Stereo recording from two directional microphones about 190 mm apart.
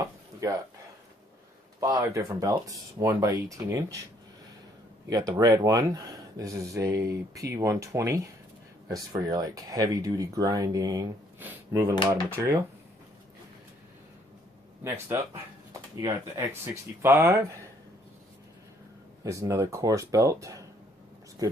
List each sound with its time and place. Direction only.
0.0 s a sound: 20° right (ahead or behind)
1.8 s speech: 20° right (ahead or behind)
5.0 s speech: 20° right (ahead or behind)
14.8 s speech: 15° right (ahead or behind)
17.0 s speech: 15° right (ahead or behind)
19.2 s speech: 15° right (ahead or behind)